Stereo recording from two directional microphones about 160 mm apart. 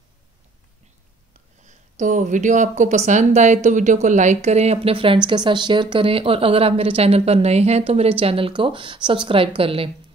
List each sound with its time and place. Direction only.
1.6 s speech: 50° right (ahead or behind)